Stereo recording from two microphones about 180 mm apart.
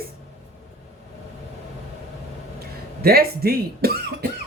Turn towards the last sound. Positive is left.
turn(degrees=-60)  # may be behind; listen again after turning